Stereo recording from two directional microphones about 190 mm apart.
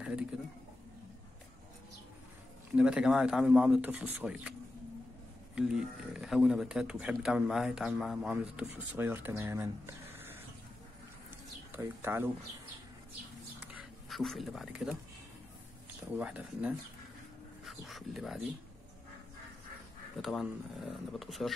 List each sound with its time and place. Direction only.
2.7 s speech: 5° right (ahead or behind)
5.6 s speech: 5° right (ahead or behind)
11.7 s speech: 10° right (ahead or behind)
13.7 s speech: centre (ahead or behind)
16.2 s speech: 5° right (ahead or behind)
20.2 s speech: centre (ahead or behind)